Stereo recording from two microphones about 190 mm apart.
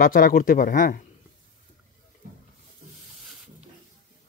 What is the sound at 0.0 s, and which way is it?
Speech, 50° left (ahead or behind).